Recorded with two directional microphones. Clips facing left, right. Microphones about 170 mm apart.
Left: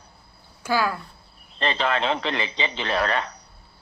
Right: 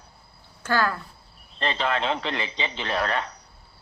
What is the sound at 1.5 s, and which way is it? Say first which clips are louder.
Speech: left 2 dB; 90° left.